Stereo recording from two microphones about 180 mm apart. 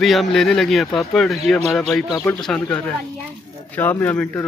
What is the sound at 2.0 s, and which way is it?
Speech, 15° left (ahead or behind).